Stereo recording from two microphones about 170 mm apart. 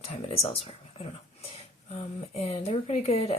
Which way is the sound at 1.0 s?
35° left (ahead or behind).